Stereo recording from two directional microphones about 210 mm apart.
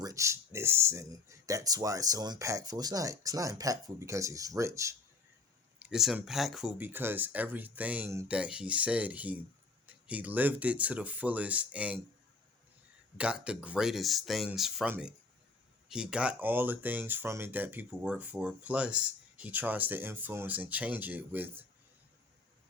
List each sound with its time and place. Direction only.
0.0 s speech: 15° right (ahead or behind)
5.8 s speech: centre (ahead or behind)
13.1 s speech: 5° right (ahead or behind)